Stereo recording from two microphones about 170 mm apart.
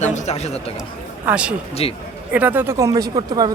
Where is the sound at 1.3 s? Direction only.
5° right (ahead or behind).